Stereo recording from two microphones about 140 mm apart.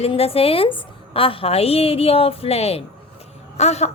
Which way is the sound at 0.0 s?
45° left (ahead or behind).